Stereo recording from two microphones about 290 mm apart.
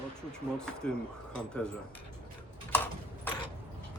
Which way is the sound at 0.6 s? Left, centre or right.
Centre.